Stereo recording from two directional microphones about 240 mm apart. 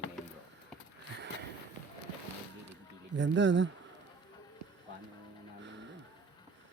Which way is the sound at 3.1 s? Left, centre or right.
Right.